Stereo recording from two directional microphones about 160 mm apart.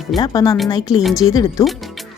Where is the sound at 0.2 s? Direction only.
25° left (ahead or behind).